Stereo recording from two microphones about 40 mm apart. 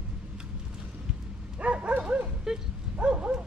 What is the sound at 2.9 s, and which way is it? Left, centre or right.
Dog, right.